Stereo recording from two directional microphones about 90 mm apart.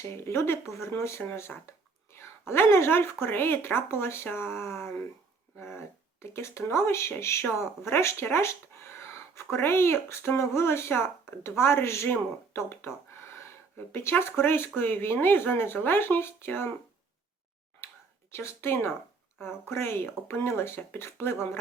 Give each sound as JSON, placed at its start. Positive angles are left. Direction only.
{"t": 0.3, "sound": "speech", "side_deg": 30}
{"t": 17.8, "sound": "a sound", "side_deg": 25}
{"t": 18.3, "sound": "speech", "side_deg": 25}